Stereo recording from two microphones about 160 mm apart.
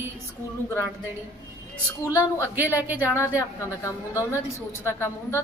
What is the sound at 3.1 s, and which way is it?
A woman's voice, 15° left (ahead or behind).